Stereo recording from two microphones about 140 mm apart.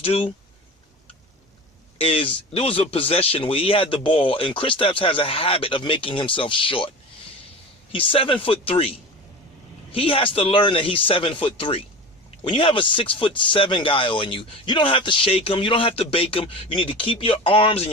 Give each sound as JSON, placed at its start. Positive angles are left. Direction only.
{"t": 0.0, "sound": "speech", "side_deg": 45}
{"t": 2.0, "sound": "speech", "side_deg": 40}
{"t": 7.9, "sound": "speech", "side_deg": 40}